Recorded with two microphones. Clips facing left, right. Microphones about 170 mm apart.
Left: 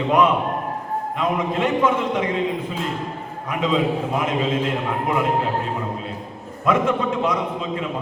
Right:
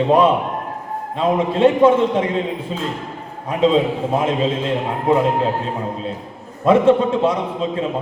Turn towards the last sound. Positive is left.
turn(degrees=-30)  # may be behind; listen again after turning